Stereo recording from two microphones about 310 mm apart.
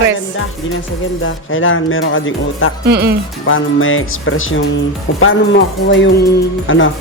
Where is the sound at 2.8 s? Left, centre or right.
Right.